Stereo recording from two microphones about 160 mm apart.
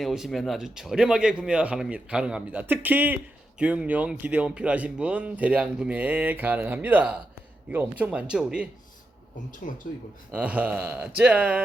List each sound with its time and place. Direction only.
0.0 s speech: centre (ahead or behind)
9.5 s speech: 55° left (ahead or behind)
10.3 s speech: 10° right (ahead or behind)